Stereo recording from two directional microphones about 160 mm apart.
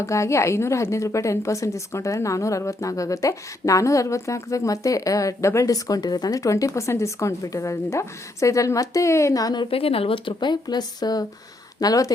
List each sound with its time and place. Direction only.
0.0 s a woman's voice: 20° left (ahead or behind)